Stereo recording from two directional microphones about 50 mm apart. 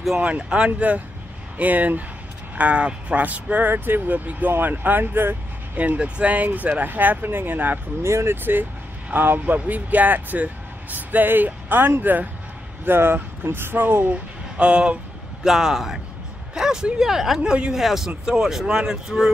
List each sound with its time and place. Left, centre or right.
0.2 s speech: right
0.7 s speech: right
3.6 s speech: right
4.1 s speech: right
5.8 s speech: right
8.0 s speech: right
9.1 s speech: right
12.8 s speech: right
14.1 s speech: right
15.4 s speech: centre
17.4 s speech: centre
17.7 s speech: centre